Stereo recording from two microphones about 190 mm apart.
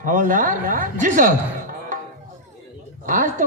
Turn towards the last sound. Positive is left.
turn(degrees=-45)  # may be behind; listen again after turning